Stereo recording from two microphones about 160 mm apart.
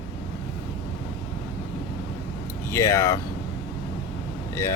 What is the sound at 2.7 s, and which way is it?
Speech, 20° left (ahead or behind).